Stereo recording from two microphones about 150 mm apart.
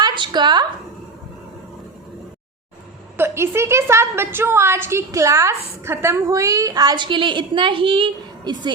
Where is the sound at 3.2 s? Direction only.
15° right (ahead or behind).